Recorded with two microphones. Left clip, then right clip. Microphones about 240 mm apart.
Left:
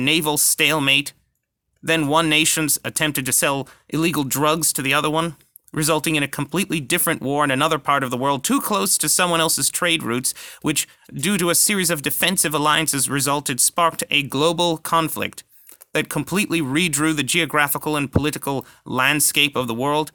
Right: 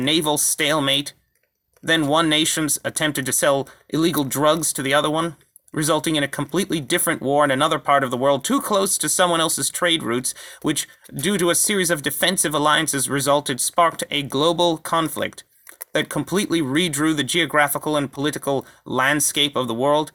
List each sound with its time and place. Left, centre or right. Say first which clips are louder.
0.0 s speech: left 1 dB; left